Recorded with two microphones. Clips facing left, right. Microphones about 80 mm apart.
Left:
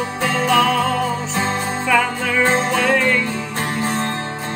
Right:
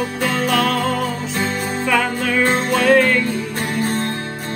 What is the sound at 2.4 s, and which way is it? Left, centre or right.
Music, left.